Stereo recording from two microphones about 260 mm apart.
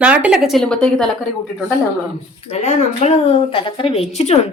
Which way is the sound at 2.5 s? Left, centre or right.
Left.